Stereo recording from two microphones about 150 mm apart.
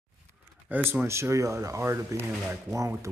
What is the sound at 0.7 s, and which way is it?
Speech, 10° right (ahead or behind).